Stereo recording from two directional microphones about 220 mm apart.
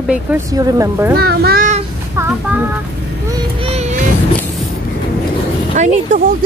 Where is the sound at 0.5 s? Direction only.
15° right (ahead or behind).